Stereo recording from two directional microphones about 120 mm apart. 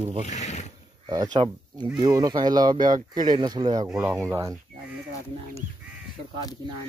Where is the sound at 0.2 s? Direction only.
75° left (ahead or behind).